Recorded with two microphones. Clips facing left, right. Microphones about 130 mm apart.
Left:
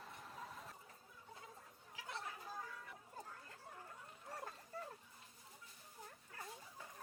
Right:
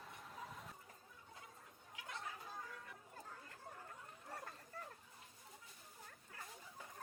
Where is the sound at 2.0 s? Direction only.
30° left (ahead or behind).